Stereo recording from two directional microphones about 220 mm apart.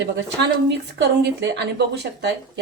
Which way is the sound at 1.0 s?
50° right (ahead or behind).